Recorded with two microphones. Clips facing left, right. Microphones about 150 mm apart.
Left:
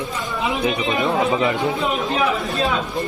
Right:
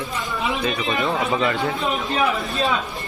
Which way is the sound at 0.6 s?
20° left (ahead or behind).